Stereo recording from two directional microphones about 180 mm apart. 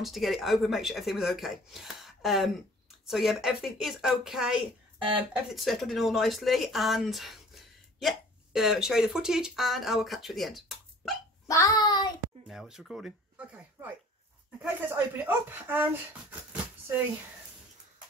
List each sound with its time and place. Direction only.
0.0 s speech: centre (ahead or behind)
11.4 s child singing: 20° left (ahead or behind)
12.4 s speech: 5° right (ahead or behind)